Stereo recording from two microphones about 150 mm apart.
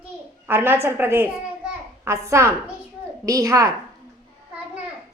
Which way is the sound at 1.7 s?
20° right (ahead or behind).